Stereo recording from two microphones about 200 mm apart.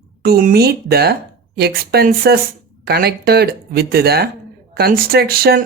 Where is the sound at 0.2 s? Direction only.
50° right (ahead or behind).